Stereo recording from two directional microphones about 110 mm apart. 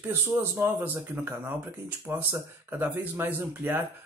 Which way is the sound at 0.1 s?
20° right (ahead or behind).